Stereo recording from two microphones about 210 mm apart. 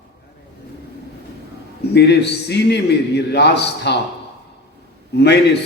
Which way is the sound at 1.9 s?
55° left (ahead or behind).